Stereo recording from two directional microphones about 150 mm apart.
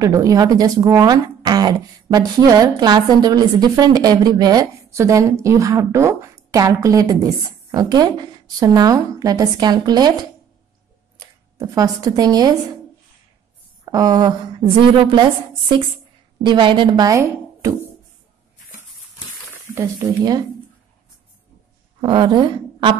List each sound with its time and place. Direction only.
0.0 s speech: 20° right (ahead or behind)
11.1 s speech: 25° right (ahead or behind)
13.8 s a woman's voice: 25° right (ahead or behind)
16.4 s speech: 30° right (ahead or behind)
19.7 s speech: 25° right (ahead or behind)
22.0 s a woman's voice: 35° right (ahead or behind)